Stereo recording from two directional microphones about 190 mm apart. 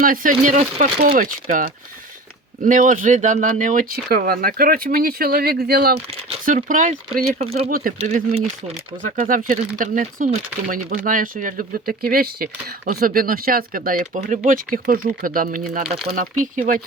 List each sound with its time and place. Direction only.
0.0 s speech: 45° right (ahead or behind)
6.4 s speech: 45° right (ahead or behind)
9.0 s speech: 45° right (ahead or behind)